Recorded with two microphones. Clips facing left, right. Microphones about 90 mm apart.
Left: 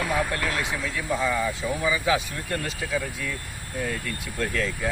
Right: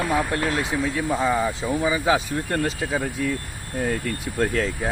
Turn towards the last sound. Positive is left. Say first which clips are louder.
# right 5 dB
turn(degrees=-35)  # may be behind; listen again after turning